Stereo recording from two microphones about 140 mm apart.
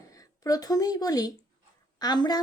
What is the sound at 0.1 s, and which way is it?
A woman's voice, 25° left (ahead or behind).